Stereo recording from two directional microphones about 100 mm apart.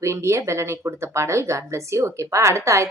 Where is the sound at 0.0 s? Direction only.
30° right (ahead or behind).